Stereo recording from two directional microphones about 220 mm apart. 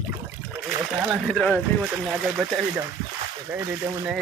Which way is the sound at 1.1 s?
Centre (ahead or behind).